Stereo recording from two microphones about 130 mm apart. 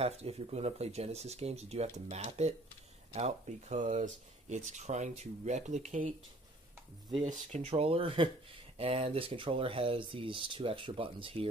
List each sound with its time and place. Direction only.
0.0 s speech: 55° right (ahead or behind); by 6.0 s 75° right (ahead or behind)
7.5 s speech: 50° right (ahead or behind)